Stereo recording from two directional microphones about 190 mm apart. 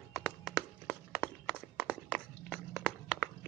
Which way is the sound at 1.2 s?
5° left (ahead or behind).